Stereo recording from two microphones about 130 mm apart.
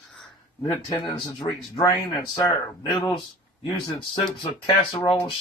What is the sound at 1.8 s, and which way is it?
Speech, 30° left (ahead or behind).